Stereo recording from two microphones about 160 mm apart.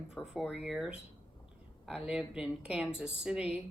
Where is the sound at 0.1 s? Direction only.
5° right (ahead or behind).